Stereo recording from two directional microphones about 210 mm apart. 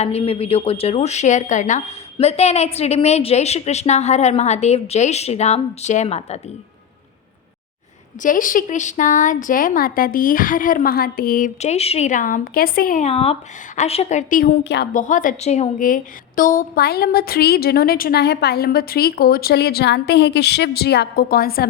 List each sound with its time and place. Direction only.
0.0 s speech: 30° left (ahead or behind)
8.2 s speech: 40° left (ahead or behind)
14.9 s a woman's voice: 40° left (ahead or behind)